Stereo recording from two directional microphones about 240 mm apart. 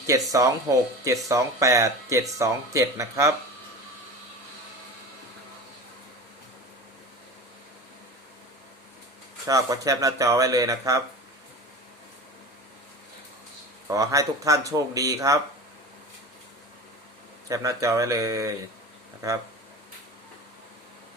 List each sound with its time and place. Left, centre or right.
0.1 s speech: centre
9.5 s speech: centre
13.8 s speech: centre
17.5 s speech: centre